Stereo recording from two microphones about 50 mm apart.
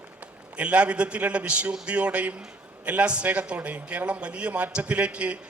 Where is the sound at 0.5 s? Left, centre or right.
Right.